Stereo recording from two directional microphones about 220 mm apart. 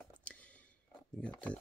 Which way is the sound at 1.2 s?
5° left (ahead or behind).